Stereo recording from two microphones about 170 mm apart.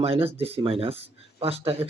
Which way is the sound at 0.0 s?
35° right (ahead or behind).